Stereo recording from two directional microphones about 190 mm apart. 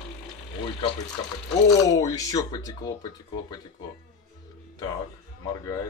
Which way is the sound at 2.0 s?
15° left (ahead or behind).